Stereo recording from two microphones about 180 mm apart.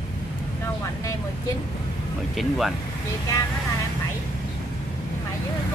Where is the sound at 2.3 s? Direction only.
Centre (ahead or behind).